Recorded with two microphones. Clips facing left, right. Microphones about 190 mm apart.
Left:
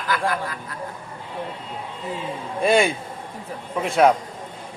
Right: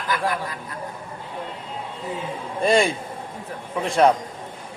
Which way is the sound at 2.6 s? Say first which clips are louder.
Even; centre (ahead or behind).